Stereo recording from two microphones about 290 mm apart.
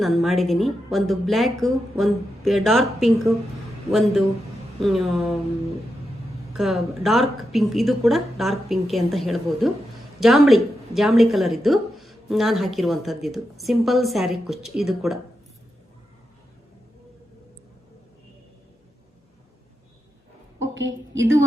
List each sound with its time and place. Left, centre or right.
0.0 s a woman's voice: centre
4.8 s a woman's voice: centre
6.6 s a woman's voice: centre
20.6 s a sound: right